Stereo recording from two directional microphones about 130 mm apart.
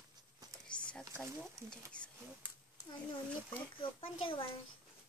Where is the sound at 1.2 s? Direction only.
5° left (ahead or behind).